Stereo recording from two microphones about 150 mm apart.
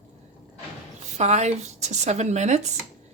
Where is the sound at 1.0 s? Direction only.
50° right (ahead or behind).